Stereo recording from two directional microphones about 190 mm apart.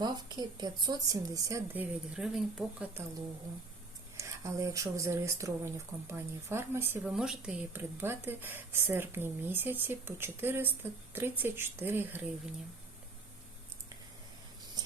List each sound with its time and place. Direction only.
0.0 s speech: 20° right (ahead or behind); by 3.0 s 5° right (ahead or behind)
4.2 s speech: 15° right (ahead or behind)